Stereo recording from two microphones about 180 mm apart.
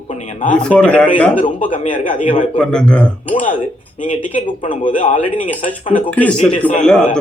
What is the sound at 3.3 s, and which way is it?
Speech, 45° left (ahead or behind).